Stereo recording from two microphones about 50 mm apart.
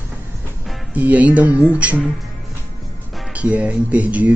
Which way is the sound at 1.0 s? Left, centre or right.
Right.